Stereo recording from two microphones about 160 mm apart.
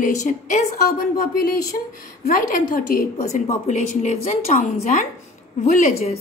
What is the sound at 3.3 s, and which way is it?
A woman's voice, 45° left (ahead or behind).